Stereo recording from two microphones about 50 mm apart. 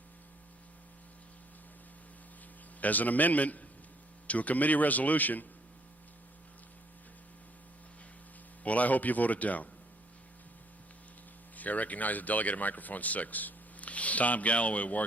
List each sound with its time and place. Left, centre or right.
2.8 s a man's voice: left
8.6 s a man's voice: left
11.5 s speech: left